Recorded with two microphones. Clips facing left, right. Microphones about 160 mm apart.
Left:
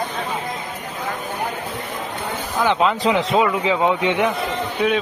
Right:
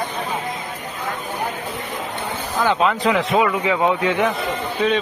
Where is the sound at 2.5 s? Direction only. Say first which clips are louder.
Even; 20° left (ahead or behind).